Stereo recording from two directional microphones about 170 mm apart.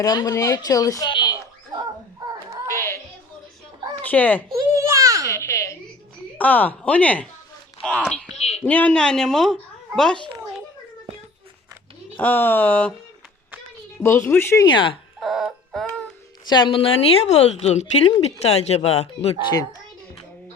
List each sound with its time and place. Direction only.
0.0 s speech: 20° left (ahead or behind)
2.7 s a sound: 15° left (ahead or behind)
4.0 s speech: 10° left (ahead or behind)
4.5 s a sound: 20° right (ahead or behind)
5.3 s a sound: 15° left (ahead or behind)
6.3 s speech: 10° left (ahead or behind)
8.4 s a sound: 40° left (ahead or behind)
8.6 s a woman's voice: 10° left (ahead or behind)
12.1 s speech: 10° left (ahead or behind)
14.0 s speech: 15° left (ahead or behind)
15.2 s music: centre (ahead or behind)
16.5 s speech: 30° left (ahead or behind)